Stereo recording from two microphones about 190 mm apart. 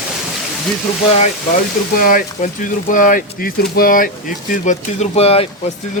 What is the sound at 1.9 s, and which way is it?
Speech, 50° left (ahead or behind).